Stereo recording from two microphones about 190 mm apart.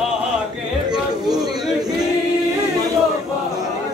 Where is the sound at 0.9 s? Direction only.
Centre (ahead or behind).